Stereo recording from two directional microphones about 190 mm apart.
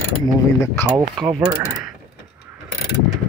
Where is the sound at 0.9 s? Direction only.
20° right (ahead or behind).